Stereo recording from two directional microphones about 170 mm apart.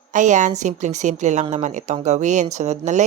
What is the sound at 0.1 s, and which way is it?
A woman's voice, 45° right (ahead or behind).